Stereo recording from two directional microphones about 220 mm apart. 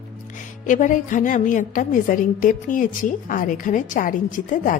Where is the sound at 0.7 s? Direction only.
35° left (ahead or behind).